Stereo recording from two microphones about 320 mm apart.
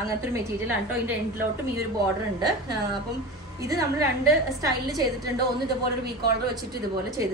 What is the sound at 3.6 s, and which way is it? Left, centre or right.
Speech, centre.